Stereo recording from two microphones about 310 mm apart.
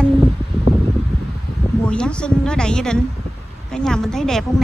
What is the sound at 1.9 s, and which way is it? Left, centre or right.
Speech, centre.